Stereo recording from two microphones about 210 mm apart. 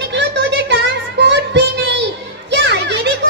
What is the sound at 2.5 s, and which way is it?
Children playing, 55° right (ahead or behind).